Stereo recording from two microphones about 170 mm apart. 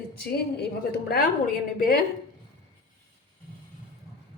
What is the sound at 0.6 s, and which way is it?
Speech, 65° left (ahead or behind).